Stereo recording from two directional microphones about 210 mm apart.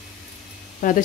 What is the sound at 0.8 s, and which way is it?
Speech, 40° left (ahead or behind).